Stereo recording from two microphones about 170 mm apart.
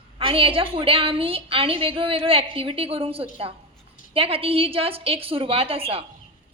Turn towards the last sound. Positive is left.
turn(degrees=-35)  # may be behind; listen again after turning